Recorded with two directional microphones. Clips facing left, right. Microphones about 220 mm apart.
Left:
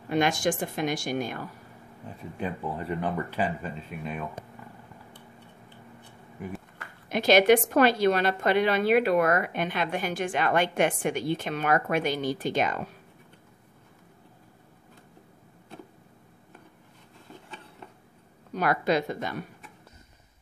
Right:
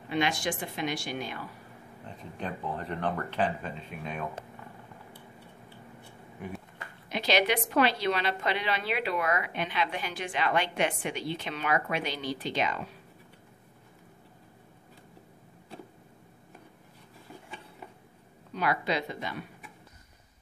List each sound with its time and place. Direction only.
0.1 s a woman's voice: 45° left (ahead or behind)
2.0 s speech: 10° left (ahead or behind)
7.1 s a woman's voice: 50° left (ahead or behind)
18.5 s a woman's voice: 45° left (ahead or behind)